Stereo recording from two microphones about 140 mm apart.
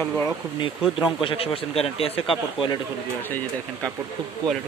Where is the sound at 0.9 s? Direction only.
5° right (ahead or behind).